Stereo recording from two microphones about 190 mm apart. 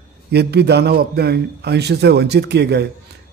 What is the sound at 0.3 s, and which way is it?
A man's voice, 60° right (ahead or behind).